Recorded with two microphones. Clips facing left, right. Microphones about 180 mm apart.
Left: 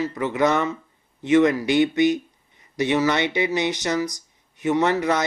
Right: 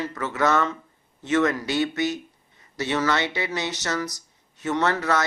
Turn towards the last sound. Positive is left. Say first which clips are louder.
# left 3 dB
turn(degrees=15)  # may be behind; listen again after turning